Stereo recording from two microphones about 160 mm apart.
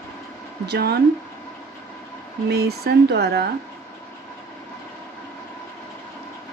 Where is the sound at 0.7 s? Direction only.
90° right.